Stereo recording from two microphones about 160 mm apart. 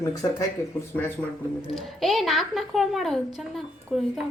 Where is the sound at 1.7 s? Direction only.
Centre (ahead or behind).